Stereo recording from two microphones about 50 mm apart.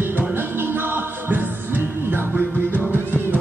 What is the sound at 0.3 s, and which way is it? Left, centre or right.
Music, right.